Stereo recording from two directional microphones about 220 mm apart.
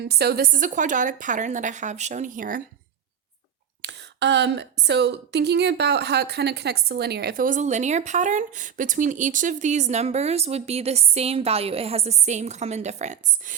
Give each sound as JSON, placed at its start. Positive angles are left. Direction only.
{"t": 0.0, "sound": "a woman's voice", "side_deg": -45}
{"t": 3.8, "sound": "a woman's voice", "side_deg": -50}